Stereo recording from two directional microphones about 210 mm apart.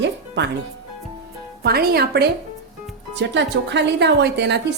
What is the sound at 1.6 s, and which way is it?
A woman's voice, 50° right (ahead or behind).